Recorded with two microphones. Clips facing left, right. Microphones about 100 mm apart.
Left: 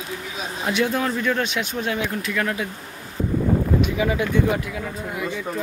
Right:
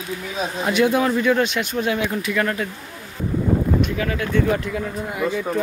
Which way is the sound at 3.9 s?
15° left (ahead or behind).